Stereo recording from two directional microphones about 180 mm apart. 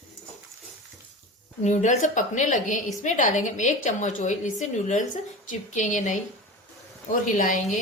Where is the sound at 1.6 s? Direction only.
40° left (ahead or behind).